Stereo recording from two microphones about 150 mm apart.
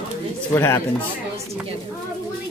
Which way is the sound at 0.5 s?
15° left (ahead or behind).